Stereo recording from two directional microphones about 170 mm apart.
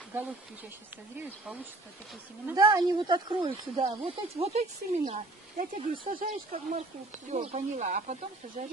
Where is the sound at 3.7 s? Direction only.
40° right (ahead or behind).